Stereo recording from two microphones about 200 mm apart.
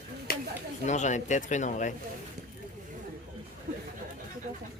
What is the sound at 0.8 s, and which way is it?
Speech, 35° left (ahead or behind).